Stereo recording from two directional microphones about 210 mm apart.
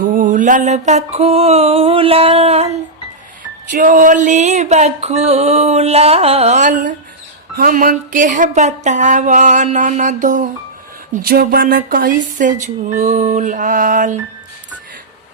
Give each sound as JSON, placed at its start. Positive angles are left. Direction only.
{"t": 0.0, "sound": "mantra", "side_deg": -40}
{"t": 3.7, "sound": "music", "side_deg": -40}